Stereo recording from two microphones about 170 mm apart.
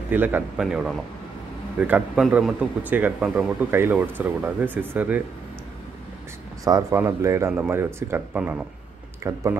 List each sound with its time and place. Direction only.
0.1 s a man's voice: 10° right (ahead or behind)
6.6 s speech: 20° right (ahead or behind)